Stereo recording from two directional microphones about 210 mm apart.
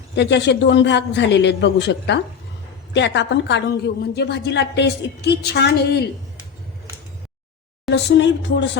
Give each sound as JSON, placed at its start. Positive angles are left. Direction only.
{"t": 0.2, "sound": "a man's voice", "side_deg": 55}
{"t": 7.9, "sound": "a man's voice", "side_deg": 55}